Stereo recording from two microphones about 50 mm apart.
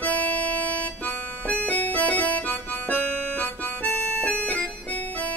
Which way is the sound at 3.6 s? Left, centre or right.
Left.